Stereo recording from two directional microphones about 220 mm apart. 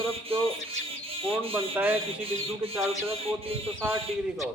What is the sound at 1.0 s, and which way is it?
Bird, 25° right (ahead or behind).